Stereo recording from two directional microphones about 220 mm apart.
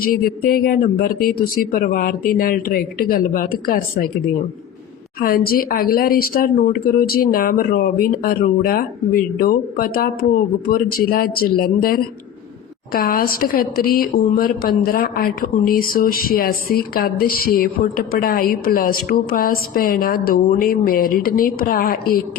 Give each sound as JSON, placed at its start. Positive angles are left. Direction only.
{"t": 0.0, "sound": "a woman's voice", "side_deg": 40}
{"t": 5.2, "sound": "a woman's voice", "side_deg": 40}